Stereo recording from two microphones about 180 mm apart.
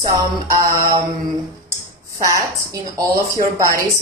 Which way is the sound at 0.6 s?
15° right (ahead or behind).